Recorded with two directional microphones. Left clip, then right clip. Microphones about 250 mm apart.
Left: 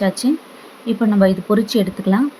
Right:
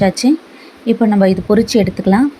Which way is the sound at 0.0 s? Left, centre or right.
Centre.